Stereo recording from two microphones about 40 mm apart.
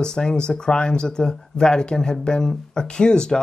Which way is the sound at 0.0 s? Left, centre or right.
Centre.